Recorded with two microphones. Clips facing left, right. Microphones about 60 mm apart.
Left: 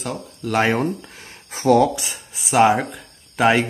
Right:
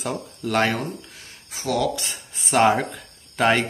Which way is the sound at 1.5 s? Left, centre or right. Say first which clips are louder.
Left 8 dB; left.